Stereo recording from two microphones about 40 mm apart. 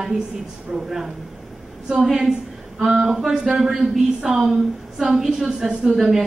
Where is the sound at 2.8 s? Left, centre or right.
Centre.